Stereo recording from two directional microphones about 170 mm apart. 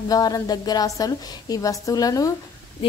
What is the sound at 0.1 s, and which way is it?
A woman's voice, 20° left (ahead or behind).